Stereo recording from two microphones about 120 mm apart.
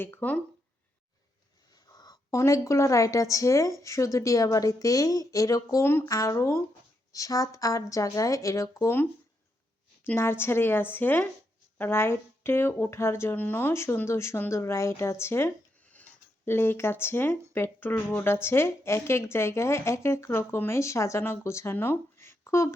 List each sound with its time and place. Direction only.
0.0 s speech: 15° left (ahead or behind)
1.7 s a sound: 35° left (ahead or behind)
2.4 s speech: 25° left (ahead or behind)
10.1 s speech: 20° left (ahead or behind)